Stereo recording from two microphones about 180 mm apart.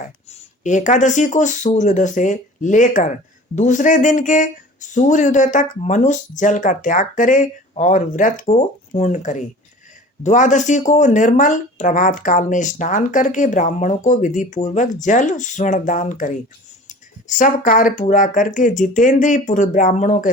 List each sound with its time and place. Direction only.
0.0 s speech: 45° left (ahead or behind)